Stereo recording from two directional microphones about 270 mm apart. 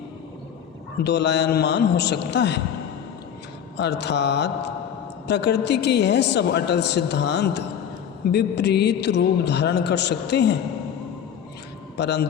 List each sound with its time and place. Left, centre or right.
1.0 s a man's voice: left
3.8 s a man's voice: left
11.9 s a man's voice: left